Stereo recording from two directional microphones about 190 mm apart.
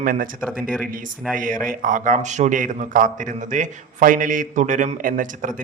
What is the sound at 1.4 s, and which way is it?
A man's voice, 45° right (ahead or behind).